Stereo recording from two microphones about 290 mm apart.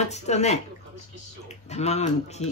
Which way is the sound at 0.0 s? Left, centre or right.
Left.